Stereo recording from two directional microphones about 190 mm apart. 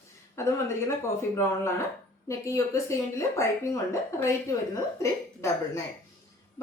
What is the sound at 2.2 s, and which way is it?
Speech, 15° left (ahead or behind).